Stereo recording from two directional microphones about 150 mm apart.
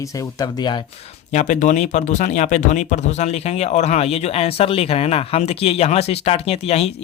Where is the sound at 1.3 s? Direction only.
55° left (ahead or behind).